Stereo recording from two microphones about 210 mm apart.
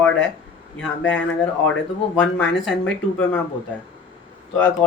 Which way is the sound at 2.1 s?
5° left (ahead or behind).